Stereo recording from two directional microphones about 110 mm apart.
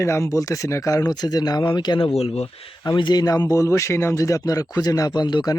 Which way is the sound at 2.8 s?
40° left (ahead or behind).